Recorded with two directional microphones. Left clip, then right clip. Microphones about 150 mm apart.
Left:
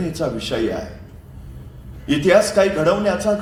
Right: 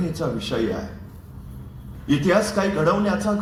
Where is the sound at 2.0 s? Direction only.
25° left (ahead or behind).